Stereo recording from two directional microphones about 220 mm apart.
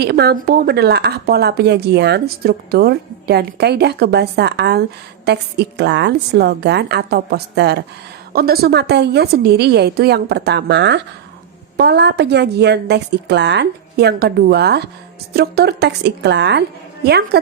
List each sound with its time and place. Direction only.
0.0 s a woman's voice: 45° right (ahead or behind)